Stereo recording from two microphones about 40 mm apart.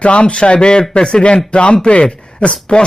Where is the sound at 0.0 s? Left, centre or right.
Left.